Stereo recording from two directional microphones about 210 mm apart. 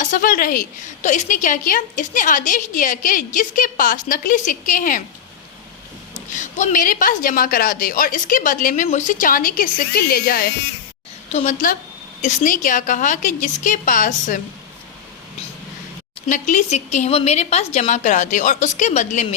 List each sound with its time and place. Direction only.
0.0 s a woman's voice: 40° left (ahead or behind)
6.1 s a woman's voice: 35° left (ahead or behind)
11.3 s a woman's voice: 35° left (ahead or behind)
16.3 s a woman's voice: 35° left (ahead or behind)